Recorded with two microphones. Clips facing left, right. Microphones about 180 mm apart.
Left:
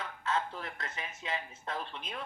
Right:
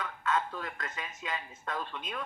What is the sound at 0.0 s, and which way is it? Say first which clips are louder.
Speech: right 2 dB; 30° left (ahead or behind).